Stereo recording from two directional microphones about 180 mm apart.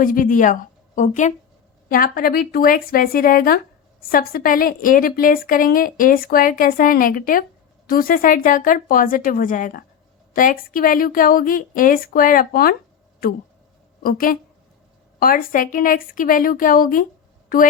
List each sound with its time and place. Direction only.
0.0 s a woman's voice: 50° left (ahead or behind)
14.0 s a woman's voice: 55° left (ahead or behind)